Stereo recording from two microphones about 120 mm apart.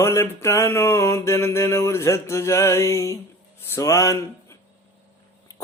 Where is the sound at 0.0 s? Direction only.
25° left (ahead or behind).